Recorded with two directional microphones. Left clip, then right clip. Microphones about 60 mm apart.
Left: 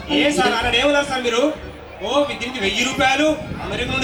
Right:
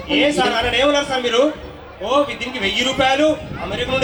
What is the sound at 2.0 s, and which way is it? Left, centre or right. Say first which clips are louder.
A man's voice: right 2 dB; right.